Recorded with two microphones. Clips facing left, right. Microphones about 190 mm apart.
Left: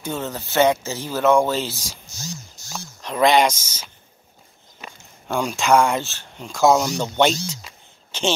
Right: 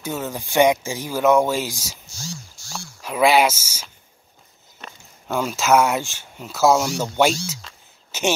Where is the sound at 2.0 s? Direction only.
20° left (ahead or behind).